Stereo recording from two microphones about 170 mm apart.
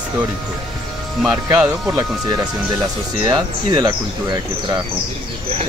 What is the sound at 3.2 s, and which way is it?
Speech, 20° right (ahead or behind).